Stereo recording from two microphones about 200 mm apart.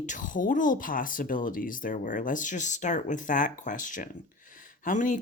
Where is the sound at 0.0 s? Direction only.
40° left (ahead or behind).